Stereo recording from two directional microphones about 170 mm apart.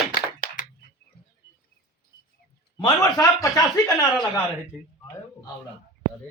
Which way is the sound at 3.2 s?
20° left (ahead or behind).